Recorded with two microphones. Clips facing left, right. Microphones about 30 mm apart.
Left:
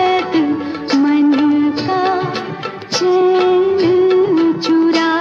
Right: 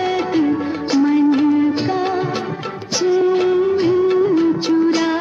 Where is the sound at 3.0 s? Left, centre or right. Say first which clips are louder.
Left 3 dB; left.